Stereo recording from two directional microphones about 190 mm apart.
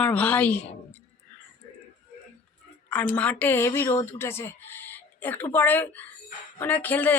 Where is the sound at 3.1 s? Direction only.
5° left (ahead or behind).